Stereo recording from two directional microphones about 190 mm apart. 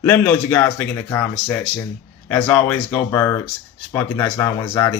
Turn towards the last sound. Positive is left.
turn(degrees=10)  # may be behind; listen again after turning